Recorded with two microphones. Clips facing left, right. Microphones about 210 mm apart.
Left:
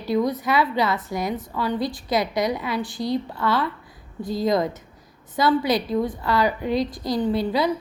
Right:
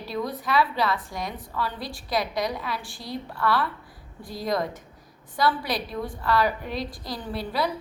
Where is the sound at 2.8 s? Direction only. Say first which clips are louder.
Left 10 dB; 20° left (ahead or behind).